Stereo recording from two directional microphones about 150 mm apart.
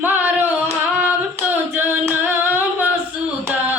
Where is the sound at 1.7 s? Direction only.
10° right (ahead or behind).